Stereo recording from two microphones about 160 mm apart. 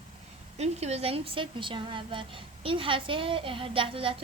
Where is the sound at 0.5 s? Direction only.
45° right (ahead or behind).